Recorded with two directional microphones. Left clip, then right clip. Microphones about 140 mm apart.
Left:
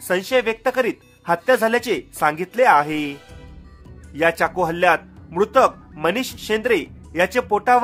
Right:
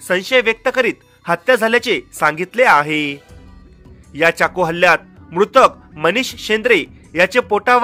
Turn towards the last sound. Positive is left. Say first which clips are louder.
# right 3 dB
turn(degrees=-25)  # may be behind; listen again after turning